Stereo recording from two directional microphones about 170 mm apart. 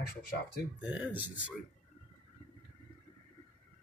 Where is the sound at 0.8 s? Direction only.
10° right (ahead or behind).